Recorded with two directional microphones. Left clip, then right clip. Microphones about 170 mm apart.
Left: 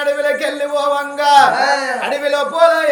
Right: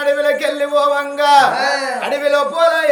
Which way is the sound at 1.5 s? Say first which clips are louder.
Left 2 dB; 5° right (ahead or behind).